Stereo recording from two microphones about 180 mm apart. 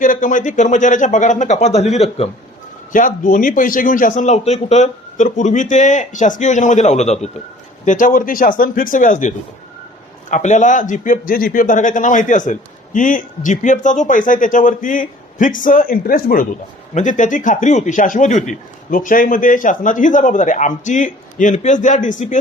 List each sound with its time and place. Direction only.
0.0 s a man's voice: 45° left (ahead or behind)
2.9 s a man's voice: 45° left (ahead or behind)